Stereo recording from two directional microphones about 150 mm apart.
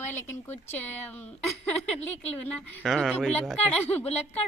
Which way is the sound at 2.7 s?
5° left (ahead or behind).